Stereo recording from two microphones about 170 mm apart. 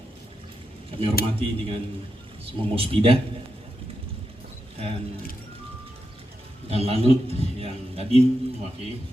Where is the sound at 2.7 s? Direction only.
35° right (ahead or behind).